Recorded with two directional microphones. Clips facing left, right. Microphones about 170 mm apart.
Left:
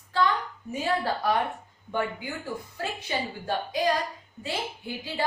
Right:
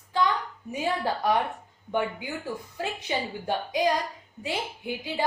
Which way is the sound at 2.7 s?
15° right (ahead or behind).